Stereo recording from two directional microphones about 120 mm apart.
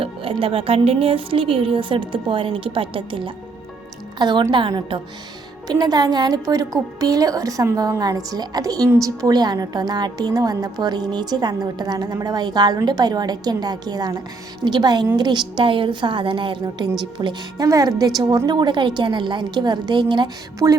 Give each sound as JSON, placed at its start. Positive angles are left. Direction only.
{"t": 0.0, "sound": "a woman's voice", "side_deg": -50}
{"t": 5.6, "sound": "a woman's voice", "side_deg": -35}